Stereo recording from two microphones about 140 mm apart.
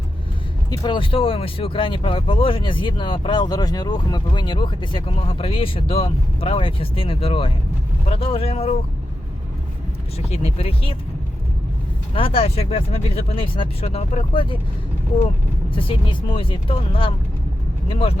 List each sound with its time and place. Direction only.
0.8 s speech: 35° left (ahead or behind)
10.2 s speech: 50° left (ahead or behind)
12.1 s speech: 40° left (ahead or behind)
15.7 s speech: 40° left (ahead or behind)